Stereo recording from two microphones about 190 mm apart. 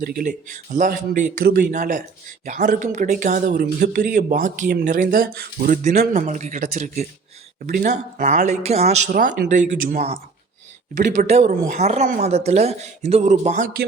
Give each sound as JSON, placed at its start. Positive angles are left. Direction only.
{"t": 0.0, "sound": "speech", "side_deg": -55}
{"t": 0.3, "sound": "speech", "side_deg": -40}
{"t": 9.1, "sound": "speech", "side_deg": -45}